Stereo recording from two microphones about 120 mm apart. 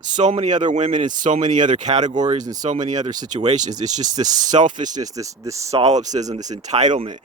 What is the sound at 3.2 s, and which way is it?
Speech, 85° right.